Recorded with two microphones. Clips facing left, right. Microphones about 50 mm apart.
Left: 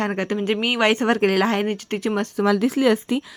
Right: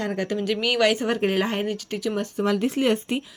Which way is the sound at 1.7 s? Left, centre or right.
Left.